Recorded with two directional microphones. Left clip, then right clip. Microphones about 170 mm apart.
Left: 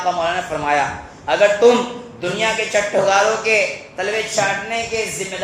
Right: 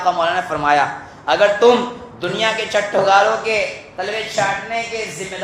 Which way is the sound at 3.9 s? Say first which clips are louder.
Left 1 dB; 25° left (ahead or behind).